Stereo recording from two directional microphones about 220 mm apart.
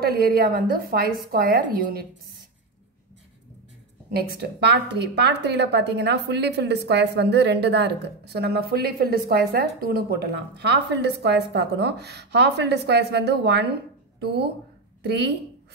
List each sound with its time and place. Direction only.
0.0 s a woman's voice: 45° right (ahead or behind)
4.4 s a woman's voice: 50° right (ahead or behind)